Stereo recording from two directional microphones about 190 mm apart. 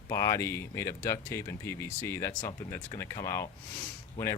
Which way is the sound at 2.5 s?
25° left (ahead or behind).